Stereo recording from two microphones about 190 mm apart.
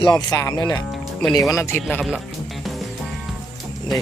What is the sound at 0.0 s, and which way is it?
Speech, 20° left (ahead or behind).